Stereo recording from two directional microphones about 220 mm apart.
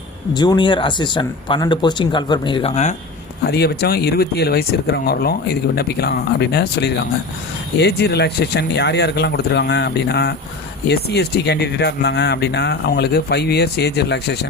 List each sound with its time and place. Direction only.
0.3 s speech: 20° left (ahead or behind)
3.5 s speech: 45° left (ahead or behind)